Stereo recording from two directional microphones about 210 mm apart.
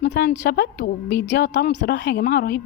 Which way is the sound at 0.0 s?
55° left (ahead or behind).